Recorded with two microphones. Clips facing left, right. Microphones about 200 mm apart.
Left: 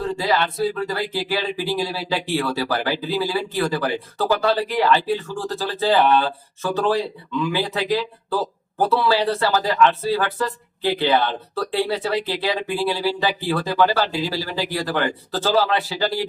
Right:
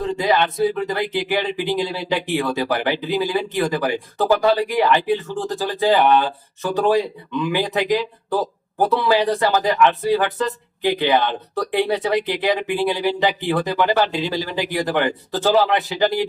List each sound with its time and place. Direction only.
0.0 s speech: 20° right (ahead or behind)